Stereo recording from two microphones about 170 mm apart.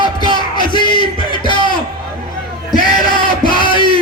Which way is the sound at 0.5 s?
25° left (ahead or behind).